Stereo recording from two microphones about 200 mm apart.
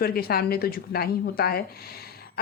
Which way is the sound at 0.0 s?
50° left (ahead or behind).